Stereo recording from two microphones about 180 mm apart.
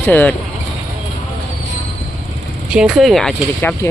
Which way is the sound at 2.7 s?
5° right (ahead or behind).